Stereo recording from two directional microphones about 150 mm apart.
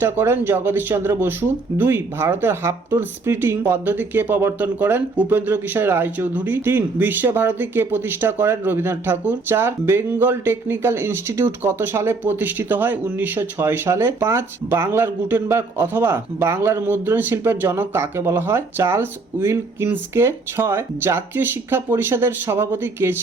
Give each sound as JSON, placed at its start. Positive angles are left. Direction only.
{"t": 0.0, "sound": "speech", "side_deg": -15}